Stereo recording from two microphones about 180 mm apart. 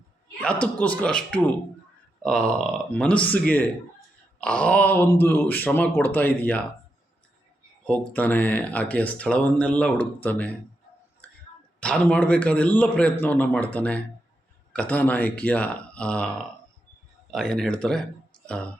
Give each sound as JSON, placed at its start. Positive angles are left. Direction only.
{"t": 0.4, "sound": "speech", "side_deg": 5}
{"t": 7.9, "sound": "speech", "side_deg": 10}
{"t": 11.8, "sound": "speech", "side_deg": 5}
{"t": 17.3, "sound": "speech", "side_deg": 5}